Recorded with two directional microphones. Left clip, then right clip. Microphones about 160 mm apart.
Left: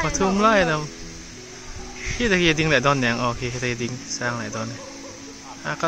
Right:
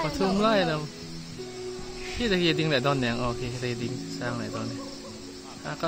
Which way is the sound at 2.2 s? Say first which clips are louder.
Left 6 dB; 5° left (ahead or behind).